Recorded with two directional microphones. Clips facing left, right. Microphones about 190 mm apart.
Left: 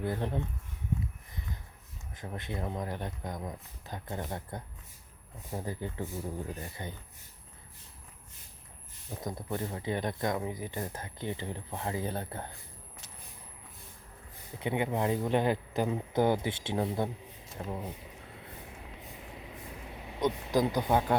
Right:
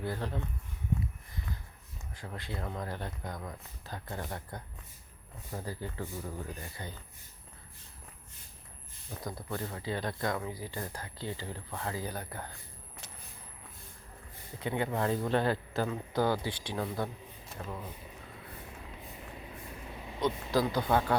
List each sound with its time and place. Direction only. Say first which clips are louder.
0.0 s speech: left 3 dB; 20° left (ahead or behind)
2.1 s speech: left 3 dB; 20° left (ahead or behind)
9.2 s speech: left 3 dB; 20° left (ahead or behind)
14.6 s speech: left 1 dB; 20° left (ahead or behind)
20.1 s speech: left 1 dB; 15° left (ahead or behind)